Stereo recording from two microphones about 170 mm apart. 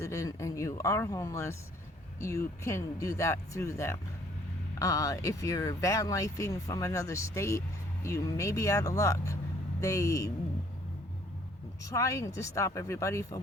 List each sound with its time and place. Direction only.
0.0 s speech: 20° left (ahead or behind)
11.9 s speech: 20° left (ahead or behind)